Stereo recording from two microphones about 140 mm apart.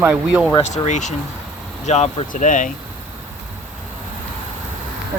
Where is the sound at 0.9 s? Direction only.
60° left (ahead or behind).